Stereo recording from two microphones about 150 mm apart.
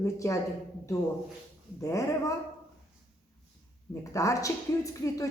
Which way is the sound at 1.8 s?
20° left (ahead or behind).